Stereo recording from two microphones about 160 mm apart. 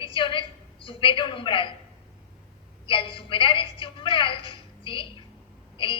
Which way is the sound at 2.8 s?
35° left (ahead or behind).